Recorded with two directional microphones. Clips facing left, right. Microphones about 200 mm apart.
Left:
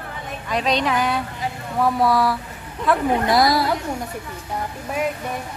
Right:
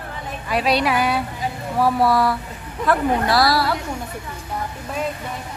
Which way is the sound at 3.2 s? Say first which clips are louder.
Left 1 dB; 20° left (ahead or behind).